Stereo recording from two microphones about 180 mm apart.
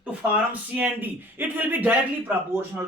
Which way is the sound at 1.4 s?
10° right (ahead or behind).